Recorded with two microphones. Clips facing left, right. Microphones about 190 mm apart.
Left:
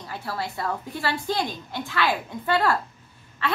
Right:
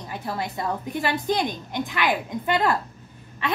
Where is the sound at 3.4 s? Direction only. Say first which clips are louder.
Even; 15° right (ahead or behind).